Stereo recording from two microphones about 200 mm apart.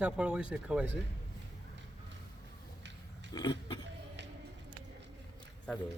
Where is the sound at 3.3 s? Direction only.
25° left (ahead or behind).